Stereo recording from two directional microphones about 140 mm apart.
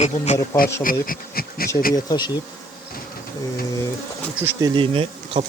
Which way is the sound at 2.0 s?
30° left (ahead or behind).